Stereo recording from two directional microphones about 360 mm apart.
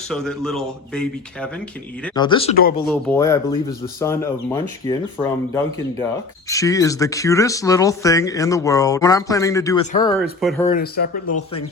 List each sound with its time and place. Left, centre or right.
0.1 s speech: centre
2.1 s speech: centre
2.9 s speech: centre
10.2 s speech: centre
10.7 s speech: left